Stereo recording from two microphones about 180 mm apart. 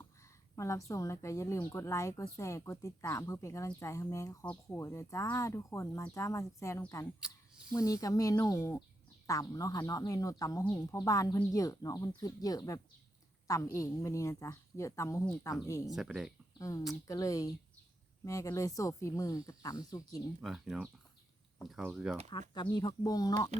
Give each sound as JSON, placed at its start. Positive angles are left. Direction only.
{"t": 0.0, "sound": "a woman's voice", "side_deg": 15}
{"t": 15.9, "sound": "speech", "side_deg": 0}
{"t": 16.6, "sound": "a woman's voice", "side_deg": 15}
{"t": 20.4, "sound": "speech", "side_deg": 0}
{"t": 22.3, "sound": "speech", "side_deg": 25}